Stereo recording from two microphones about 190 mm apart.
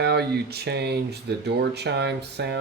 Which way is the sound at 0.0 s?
60° right (ahead or behind).